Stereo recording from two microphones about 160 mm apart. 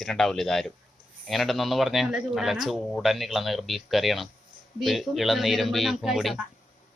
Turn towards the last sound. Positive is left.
turn(degrees=0)  # may be behind; listen again after turning